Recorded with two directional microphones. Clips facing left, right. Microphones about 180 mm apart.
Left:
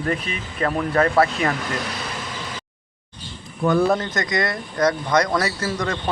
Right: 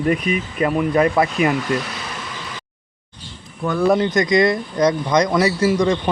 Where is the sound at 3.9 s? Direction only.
15° right (ahead or behind).